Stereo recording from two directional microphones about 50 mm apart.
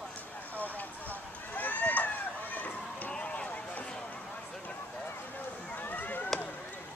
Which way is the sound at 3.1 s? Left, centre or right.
Left.